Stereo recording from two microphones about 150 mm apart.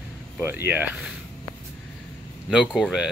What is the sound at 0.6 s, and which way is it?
Speech, 10° right (ahead or behind).